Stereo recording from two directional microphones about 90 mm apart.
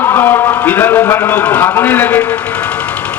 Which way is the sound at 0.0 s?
30° left (ahead or behind).